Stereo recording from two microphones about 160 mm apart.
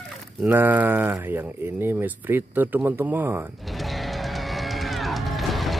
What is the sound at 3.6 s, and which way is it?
Music, centre (ahead or behind).